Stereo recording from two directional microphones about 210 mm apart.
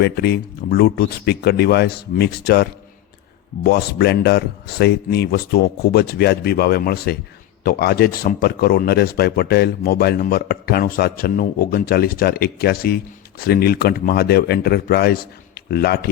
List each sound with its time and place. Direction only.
0.0 s speech: 50° left (ahead or behind)